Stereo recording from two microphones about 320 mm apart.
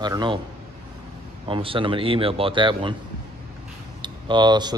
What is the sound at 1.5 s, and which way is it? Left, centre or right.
Speech, centre.